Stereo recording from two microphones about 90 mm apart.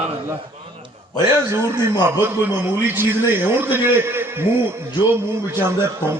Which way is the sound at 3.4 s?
25° right (ahead or behind).